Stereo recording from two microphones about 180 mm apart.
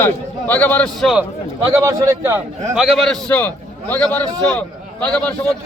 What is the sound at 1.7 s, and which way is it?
Speech, 15° right (ahead or behind).